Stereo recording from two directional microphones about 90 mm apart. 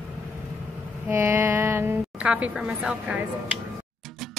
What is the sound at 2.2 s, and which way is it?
A woman's voice, 15° right (ahead or behind).